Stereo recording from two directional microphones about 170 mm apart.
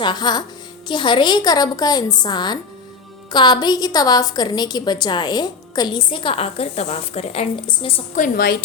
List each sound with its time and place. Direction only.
0.0 s a woman's voice: 25° left (ahead or behind)
8.1 s a woman's voice: 55° left (ahead or behind)